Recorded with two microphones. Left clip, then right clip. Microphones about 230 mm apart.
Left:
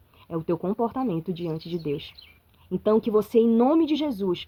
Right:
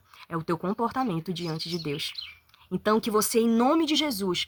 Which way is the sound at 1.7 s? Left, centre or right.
Right.